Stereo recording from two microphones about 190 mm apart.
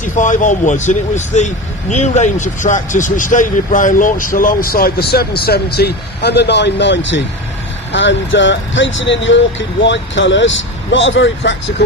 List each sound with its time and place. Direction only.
0.0 s speech: 40° left (ahead or behind); by 11.5 s 75° left (ahead or behind)